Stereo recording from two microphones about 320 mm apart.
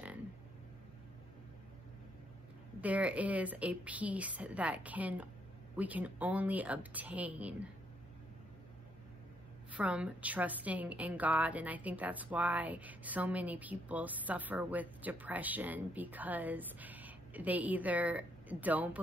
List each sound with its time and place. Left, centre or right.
2.8 s a woman's voice: centre
9.7 s a woman's voice: centre